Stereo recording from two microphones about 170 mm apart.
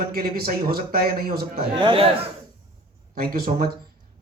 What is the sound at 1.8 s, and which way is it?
Speech, 30° right (ahead or behind).